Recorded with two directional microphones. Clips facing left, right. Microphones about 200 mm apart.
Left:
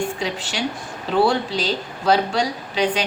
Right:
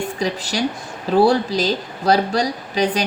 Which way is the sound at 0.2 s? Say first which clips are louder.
Right 4 dB; 40° right (ahead or behind).